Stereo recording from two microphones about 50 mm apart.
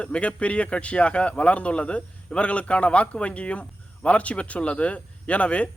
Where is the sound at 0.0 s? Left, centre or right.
Left.